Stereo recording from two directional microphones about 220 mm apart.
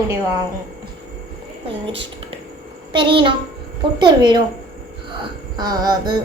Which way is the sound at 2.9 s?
20° right (ahead or behind).